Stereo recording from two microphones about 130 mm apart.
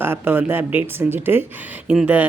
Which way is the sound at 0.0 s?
15° right (ahead or behind).